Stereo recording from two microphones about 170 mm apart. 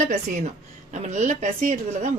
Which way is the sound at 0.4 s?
45° right (ahead or behind).